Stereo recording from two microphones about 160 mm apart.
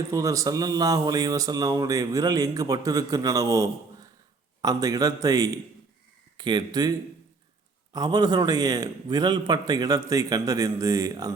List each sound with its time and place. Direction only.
0.1 s speech: 20° right (ahead or behind)
7.9 s speech: 25° right (ahead or behind)